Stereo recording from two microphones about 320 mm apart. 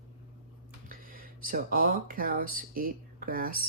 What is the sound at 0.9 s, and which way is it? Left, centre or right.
Speech, right.